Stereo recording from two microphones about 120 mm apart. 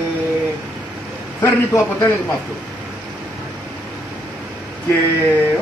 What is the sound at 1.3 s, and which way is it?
Speech, 25° left (ahead or behind).